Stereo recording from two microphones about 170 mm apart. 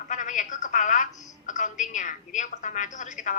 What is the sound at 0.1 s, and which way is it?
A woman's voice, 45° left (ahead or behind).